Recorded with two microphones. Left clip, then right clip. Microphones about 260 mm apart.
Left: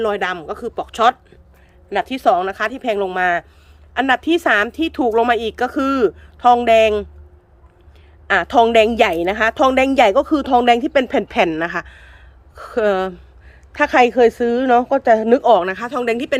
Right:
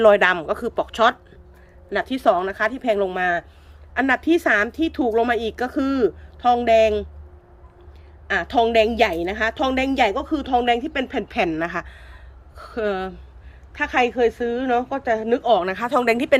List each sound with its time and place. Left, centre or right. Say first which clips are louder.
0.0 s a woman's voice: right 5 dB; centre
8.3 s a woman's voice: left 6 dB; centre